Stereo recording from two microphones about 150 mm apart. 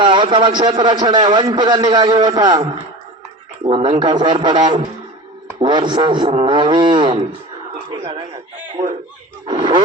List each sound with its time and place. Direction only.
0.0 s a man's voice: 30° right (ahead or behind)
9.5 s a man's voice: 30° right (ahead or behind)